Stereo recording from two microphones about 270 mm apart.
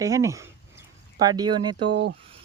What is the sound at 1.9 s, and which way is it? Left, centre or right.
Speech, right.